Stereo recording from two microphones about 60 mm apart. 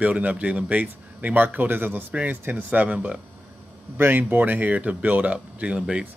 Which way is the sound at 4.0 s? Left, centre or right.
Right.